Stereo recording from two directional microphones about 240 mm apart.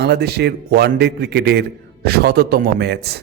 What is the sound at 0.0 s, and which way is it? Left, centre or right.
A man's voice, right.